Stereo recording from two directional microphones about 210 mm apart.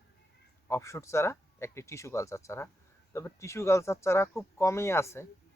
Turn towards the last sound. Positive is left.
turn(degrees=10)  # may be behind; listen again after turning